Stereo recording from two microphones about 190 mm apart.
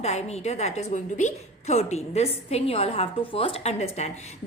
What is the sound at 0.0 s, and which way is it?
A woman's voice, 35° left (ahead or behind).